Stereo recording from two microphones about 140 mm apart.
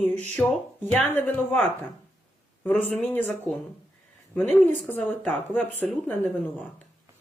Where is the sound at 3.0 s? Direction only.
15° left (ahead or behind).